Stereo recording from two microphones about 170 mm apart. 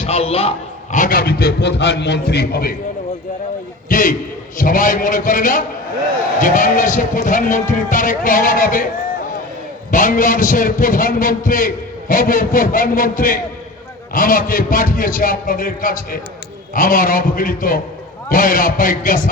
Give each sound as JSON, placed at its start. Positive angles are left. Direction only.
{"t": 0.0, "sound": "a sound", "side_deg": 35}
{"t": 0.9, "sound": "a man's voice", "side_deg": 55}
{"t": 3.8, "sound": "a man's voice", "side_deg": 50}
{"t": 9.9, "sound": "a man's voice", "side_deg": 50}